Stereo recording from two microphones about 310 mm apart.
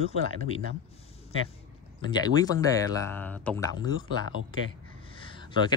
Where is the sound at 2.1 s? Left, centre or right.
Centre.